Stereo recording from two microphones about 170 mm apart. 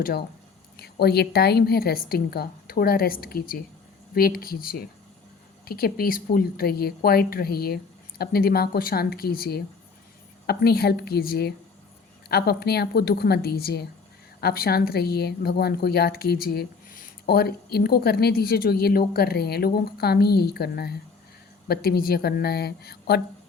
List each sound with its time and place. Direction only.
0.0 s a woman's voice: 70° left (ahead or behind)